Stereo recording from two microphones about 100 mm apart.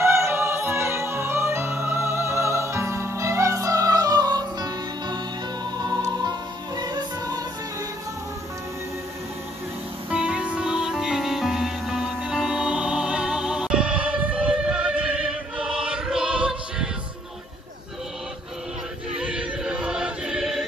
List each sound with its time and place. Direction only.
0.0 s music: 25° right (ahead or behind); by 7.4 s 40° right (ahead or behind)
10.0 s music: 10° right (ahead or behind)
19.1 s choir: 10° right (ahead or behind)